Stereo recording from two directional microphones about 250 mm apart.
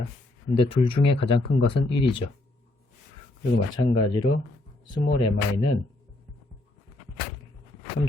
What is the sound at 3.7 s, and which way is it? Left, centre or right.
Speech, centre.